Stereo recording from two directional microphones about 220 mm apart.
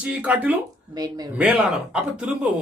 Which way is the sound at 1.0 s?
15° right (ahead or behind).